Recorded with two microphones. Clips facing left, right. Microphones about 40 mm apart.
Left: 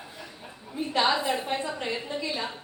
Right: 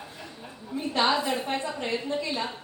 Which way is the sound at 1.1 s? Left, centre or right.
Centre.